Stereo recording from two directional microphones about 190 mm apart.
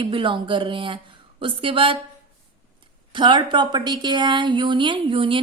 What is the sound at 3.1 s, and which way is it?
A woman's voice, 25° right (ahead or behind).